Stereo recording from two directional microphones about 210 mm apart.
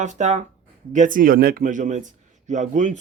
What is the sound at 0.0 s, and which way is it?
A man's voice, 35° right (ahead or behind).